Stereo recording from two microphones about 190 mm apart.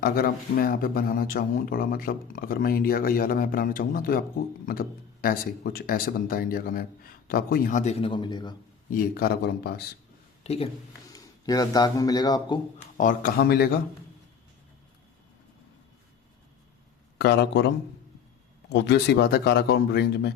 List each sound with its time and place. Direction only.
0.0 s speech: 50° left (ahead or behind); by 8.5 s 25° left (ahead or behind)
8.9 s speech: 50° left (ahead or behind)
10.4 s speech: 30° left (ahead or behind)
11.1 s speech: 20° left (ahead or behind)
13.0 s speech: 45° left (ahead or behind)
17.2 s speech: 55° left (ahead or behind)
18.7 s speech: 65° left (ahead or behind)